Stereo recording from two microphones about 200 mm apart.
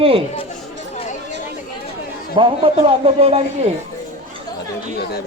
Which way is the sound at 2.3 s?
25° right (ahead or behind).